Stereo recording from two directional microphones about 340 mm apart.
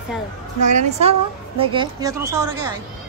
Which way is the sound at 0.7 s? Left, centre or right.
Centre.